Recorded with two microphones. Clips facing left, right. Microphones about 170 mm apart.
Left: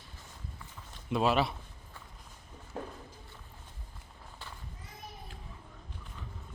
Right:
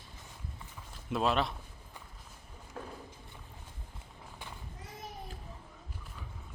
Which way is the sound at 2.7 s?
25° left (ahead or behind).